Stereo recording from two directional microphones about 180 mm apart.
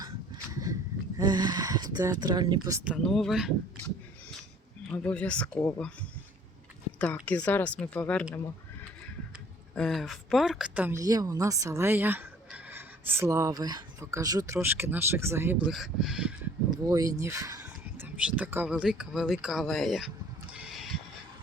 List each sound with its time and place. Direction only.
0.5 s a sound: 20° right (ahead or behind)
1.2 s speech: 25° right (ahead or behind)
2.8 s speech: centre (ahead or behind)
4.9 s speech: 5° left (ahead or behind)
9.7 s a woman's voice: centre (ahead or behind)
16.6 s speech: 20° right (ahead or behind); by 20.1 s centre (ahead or behind)
20.5 s a sound: 5° right (ahead or behind)